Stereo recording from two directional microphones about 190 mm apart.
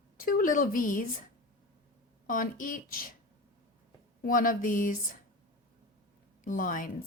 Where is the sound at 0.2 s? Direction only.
50° left (ahead or behind).